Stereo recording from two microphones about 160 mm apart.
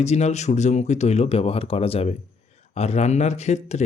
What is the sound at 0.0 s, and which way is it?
Speech, 45° left (ahead or behind).